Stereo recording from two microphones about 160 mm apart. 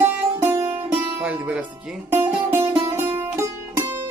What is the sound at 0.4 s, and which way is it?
Music, 15° right (ahead or behind).